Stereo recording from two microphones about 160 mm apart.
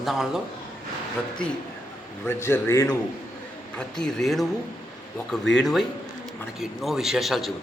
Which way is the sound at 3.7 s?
5° left (ahead or behind).